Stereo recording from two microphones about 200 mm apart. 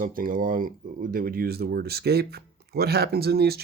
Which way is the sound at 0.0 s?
45° right (ahead or behind).